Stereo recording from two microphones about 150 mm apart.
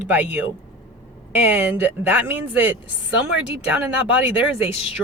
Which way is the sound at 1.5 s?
10° right (ahead or behind).